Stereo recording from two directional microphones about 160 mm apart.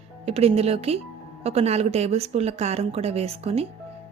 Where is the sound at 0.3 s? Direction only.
40° right (ahead or behind).